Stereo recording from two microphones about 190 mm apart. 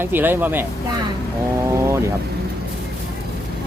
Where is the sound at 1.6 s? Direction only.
15° right (ahead or behind).